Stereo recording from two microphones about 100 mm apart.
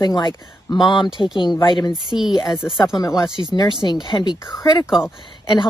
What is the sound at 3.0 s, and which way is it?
Speech, 45° left (ahead or behind).